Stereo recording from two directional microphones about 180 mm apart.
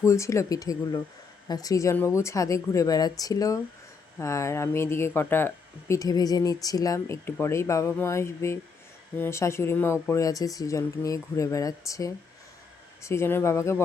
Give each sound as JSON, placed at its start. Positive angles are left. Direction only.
{"t": 0.0, "sound": "a woman's voice", "side_deg": 15}